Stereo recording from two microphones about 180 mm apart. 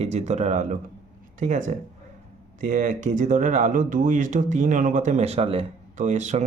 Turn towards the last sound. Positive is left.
turn(degrees=-40)  # may be behind; listen again after turning